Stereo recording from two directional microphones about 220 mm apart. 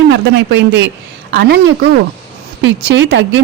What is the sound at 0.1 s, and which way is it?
Speech, 50° right (ahead or behind).